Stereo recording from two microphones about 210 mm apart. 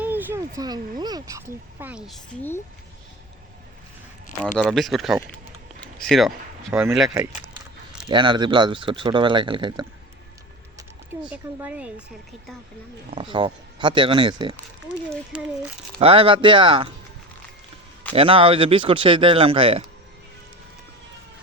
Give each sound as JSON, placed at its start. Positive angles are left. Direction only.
{"t": 0.0, "sound": "speech", "side_deg": -10}
{"t": 4.7, "sound": "speech", "side_deg": 0}
{"t": 8.0, "sound": "speech", "side_deg": -20}
{"t": 10.8, "sound": "speech", "side_deg": -5}
{"t": 13.1, "sound": "speech", "side_deg": -25}
{"t": 15.1, "sound": "speech", "side_deg": -5}
{"t": 16.0, "sound": "speech", "side_deg": -25}
{"t": 18.1, "sound": "speech", "side_deg": -25}